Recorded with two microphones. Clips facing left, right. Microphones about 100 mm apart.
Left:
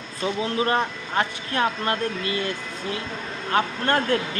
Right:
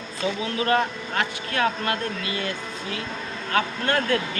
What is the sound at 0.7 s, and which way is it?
Speech, 30° left (ahead or behind).